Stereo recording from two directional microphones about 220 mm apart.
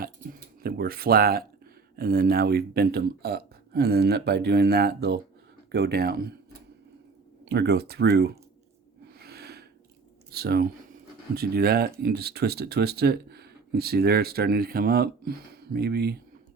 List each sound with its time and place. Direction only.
0.0 s a sound: 45° right (ahead or behind)
2.0 s speech: 45° right (ahead or behind)
7.4 s speech: 50° right (ahead or behind)
9.1 s gasp: 45° right (ahead or behind)
10.3 s speech: 45° right (ahead or behind)